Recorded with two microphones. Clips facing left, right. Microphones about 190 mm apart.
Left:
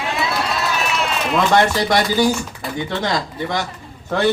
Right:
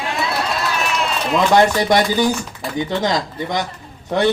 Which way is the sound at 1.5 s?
15° right (ahead or behind).